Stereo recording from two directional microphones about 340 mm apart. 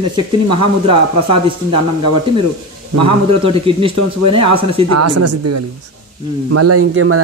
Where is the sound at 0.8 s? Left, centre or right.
Centre.